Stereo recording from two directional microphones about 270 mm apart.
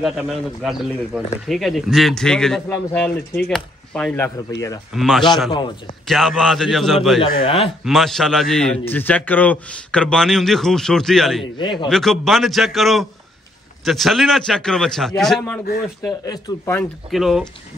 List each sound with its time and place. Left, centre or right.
0.0 s a man's voice: centre
7.4 s speech: left
7.8 s a man's voice: centre
11.5 s speech: centre
11.9 s a man's voice: centre
17.1 s a man's voice: centre